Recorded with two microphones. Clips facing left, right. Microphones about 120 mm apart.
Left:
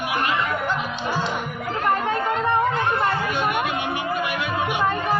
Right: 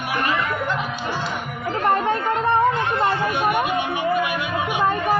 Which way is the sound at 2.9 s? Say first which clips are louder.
Right 2 dB; 25° right (ahead or behind).